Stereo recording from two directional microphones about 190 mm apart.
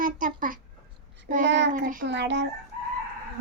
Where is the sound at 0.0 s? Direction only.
45° right (ahead or behind).